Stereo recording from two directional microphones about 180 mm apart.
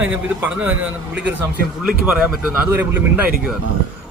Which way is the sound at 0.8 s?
75° right (ahead or behind).